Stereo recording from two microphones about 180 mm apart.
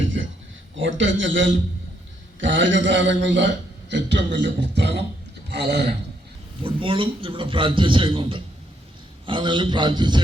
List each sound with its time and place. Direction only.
0.8 s a man's voice: 90° right; by 5.8 s 65° right (ahead or behind)
6.6 s a man's voice: 30° right (ahead or behind)